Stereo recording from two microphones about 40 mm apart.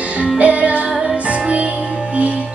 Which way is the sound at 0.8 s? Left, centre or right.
Centre.